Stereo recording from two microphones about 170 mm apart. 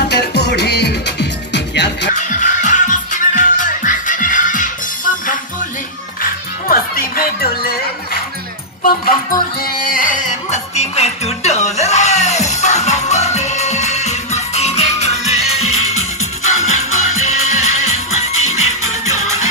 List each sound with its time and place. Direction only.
0.1 s music: 80° left
2.1 s music: 45° left (ahead or behind)
6.7 s music: 60° left (ahead or behind); by 19.5 s 40° left (ahead or behind)